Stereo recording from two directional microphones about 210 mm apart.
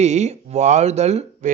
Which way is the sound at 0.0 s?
30° right (ahead or behind).